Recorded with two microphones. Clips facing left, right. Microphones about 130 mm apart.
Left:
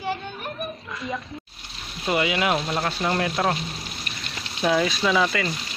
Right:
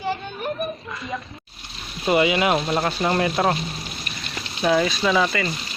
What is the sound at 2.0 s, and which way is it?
Speech, 10° right (ahead or behind).